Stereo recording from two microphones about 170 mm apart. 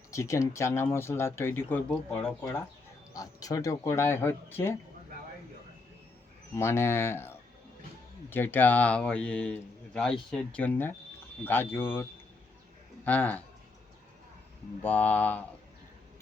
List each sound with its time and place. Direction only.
0.1 s a man's voice: 15° left (ahead or behind)
3.1 s a man's voice: 20° left (ahead or behind)
6.6 s a man's voice: 15° left (ahead or behind)
13.1 s a man's voice: 10° left (ahead or behind)
14.8 s a man's voice: 10° left (ahead or behind)